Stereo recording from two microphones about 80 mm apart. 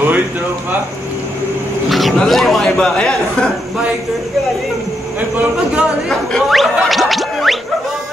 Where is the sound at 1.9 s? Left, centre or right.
Centre.